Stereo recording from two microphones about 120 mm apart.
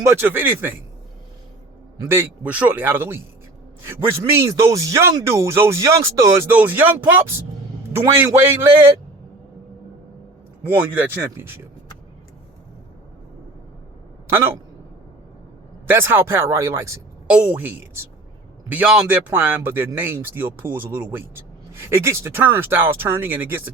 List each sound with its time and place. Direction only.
0.1 s speech: 15° right (ahead or behind)
2.0 s speech: 20° right (ahead or behind)
6.6 s speech: 15° right (ahead or behind)
11.3 s speech: 20° right (ahead or behind)
14.3 s speech: 20° right (ahead or behind)
15.9 s speech: 20° right (ahead or behind)
17.2 s speech: 10° right (ahead or behind)